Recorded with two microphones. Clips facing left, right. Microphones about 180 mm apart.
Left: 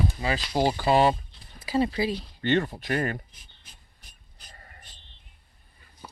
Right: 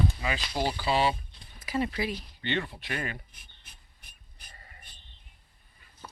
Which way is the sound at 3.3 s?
60° right (ahead or behind).